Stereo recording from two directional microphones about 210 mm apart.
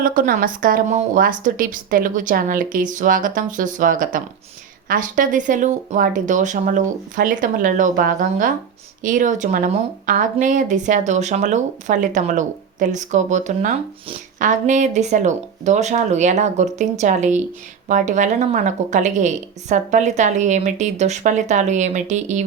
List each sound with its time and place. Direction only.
0.0 s speech: 40° right (ahead or behind)